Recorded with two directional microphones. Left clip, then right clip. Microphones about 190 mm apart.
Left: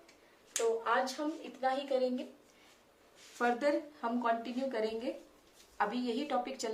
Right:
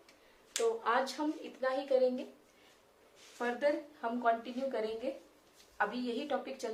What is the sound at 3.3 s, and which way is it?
A woman's voice, 25° left (ahead or behind).